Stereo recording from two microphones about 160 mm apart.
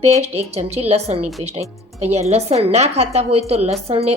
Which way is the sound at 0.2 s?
40° right (ahead or behind).